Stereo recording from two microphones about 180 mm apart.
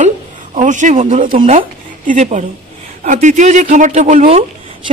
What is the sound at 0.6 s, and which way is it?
A woman's voice, 45° right (ahead or behind).